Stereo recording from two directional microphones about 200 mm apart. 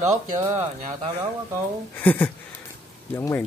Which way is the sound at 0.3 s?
30° right (ahead or behind).